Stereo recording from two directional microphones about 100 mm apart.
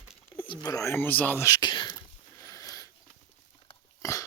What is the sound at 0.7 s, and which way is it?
Speech, 30° left (ahead or behind).